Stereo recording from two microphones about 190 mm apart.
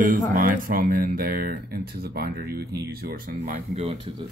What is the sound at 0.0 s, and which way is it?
Speech, 45° right (ahead or behind).